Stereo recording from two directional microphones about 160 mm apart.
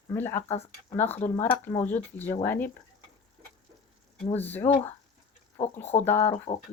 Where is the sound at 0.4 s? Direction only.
40° left (ahead or behind).